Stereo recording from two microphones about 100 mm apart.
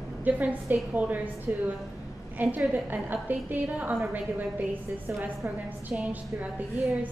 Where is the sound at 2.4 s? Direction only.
15° right (ahead or behind).